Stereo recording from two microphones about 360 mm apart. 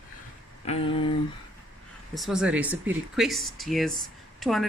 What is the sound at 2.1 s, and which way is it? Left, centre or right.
Speech, centre.